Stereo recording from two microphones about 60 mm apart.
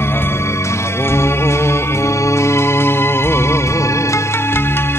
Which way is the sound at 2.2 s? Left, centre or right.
Left.